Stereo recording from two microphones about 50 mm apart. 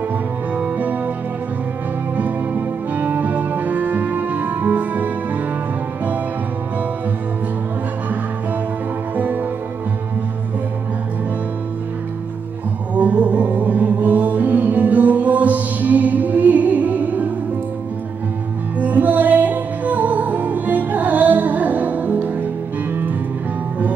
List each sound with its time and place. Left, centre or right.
0.6 s music: right
2.1 s music: right
9.1 s music: right
12.9 s music: right
18.8 s music: right